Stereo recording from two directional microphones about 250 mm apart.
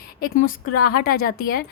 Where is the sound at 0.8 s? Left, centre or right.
Left.